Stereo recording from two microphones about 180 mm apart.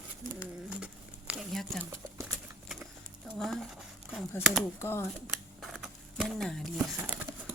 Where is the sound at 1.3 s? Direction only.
Centre (ahead or behind).